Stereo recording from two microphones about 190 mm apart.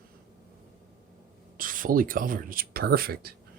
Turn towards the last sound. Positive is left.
turn(degrees=-50)  # may be behind; listen again after turning